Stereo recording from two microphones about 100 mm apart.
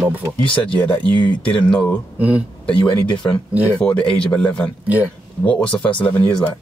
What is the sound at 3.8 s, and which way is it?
Speech, 15° left (ahead or behind).